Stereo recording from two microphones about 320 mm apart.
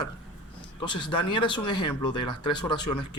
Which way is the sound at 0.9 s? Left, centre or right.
Centre.